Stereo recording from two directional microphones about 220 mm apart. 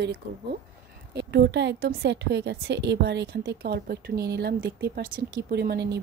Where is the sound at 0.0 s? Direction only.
50° right (ahead or behind).